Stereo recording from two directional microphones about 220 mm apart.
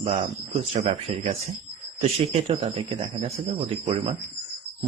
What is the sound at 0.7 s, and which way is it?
Speech, 25° right (ahead or behind).